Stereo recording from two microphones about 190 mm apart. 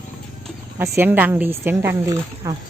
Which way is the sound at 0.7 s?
15° right (ahead or behind).